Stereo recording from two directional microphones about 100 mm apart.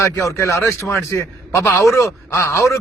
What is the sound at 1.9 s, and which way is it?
Speech, 30° left (ahead or behind).